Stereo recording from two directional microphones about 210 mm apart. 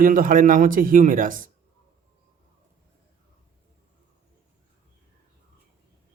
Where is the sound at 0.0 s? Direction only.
40° right (ahead or behind).